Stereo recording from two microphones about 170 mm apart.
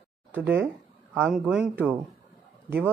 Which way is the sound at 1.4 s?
5° right (ahead or behind).